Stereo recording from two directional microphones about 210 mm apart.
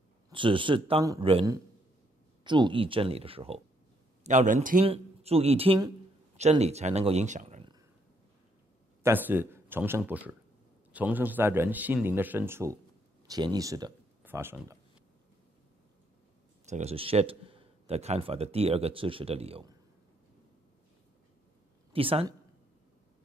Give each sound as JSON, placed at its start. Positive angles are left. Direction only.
{"t": 0.3, "sound": "speech", "side_deg": -25}
{"t": 4.8, "sound": "speech", "side_deg": -30}
{"t": 9.0, "sound": "a man's voice", "side_deg": -10}
{"t": 16.6, "sound": "speech", "side_deg": -30}
{"t": 21.9, "sound": "speech", "side_deg": -25}